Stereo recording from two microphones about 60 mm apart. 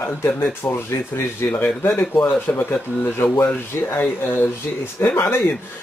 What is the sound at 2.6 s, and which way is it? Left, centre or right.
Speech, left.